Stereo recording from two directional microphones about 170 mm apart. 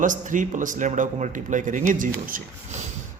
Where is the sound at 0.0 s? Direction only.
50° right (ahead or behind).